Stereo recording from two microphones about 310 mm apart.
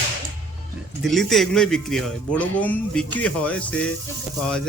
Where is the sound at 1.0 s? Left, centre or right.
Centre.